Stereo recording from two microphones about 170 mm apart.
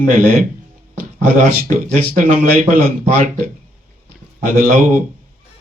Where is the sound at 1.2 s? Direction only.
55° right (ahead or behind).